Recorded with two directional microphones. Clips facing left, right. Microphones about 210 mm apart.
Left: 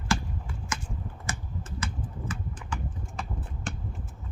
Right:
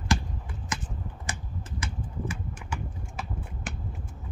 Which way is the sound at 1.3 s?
15° right (ahead or behind).